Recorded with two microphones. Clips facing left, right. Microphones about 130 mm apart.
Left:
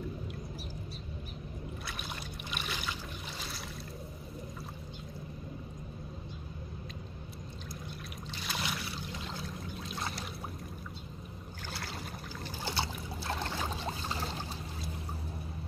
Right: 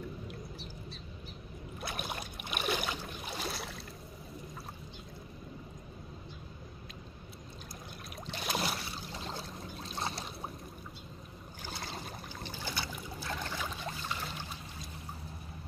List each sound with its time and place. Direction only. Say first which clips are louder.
1.9 s boat: right 3 dB; 50° right (ahead or behind)
8.3 s boat: right 4 dB; 50° right (ahead or behind); by 10.2 s 30° right (ahead or behind)
11.7 s boat: even; 20° right (ahead or behind)
12.6 s boat: left 5 dB; 30° left (ahead or behind)